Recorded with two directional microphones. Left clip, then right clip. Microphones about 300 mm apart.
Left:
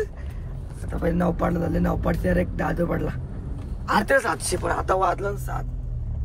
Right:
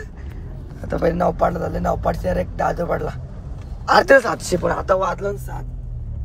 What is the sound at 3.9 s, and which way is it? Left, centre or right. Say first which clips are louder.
Speech: right 8 dB; right.